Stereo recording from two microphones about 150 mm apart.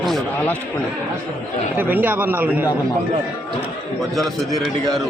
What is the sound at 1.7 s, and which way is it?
Speech, 10° right (ahead or behind).